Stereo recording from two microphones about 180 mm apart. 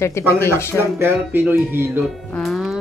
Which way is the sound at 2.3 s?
Centre (ahead or behind).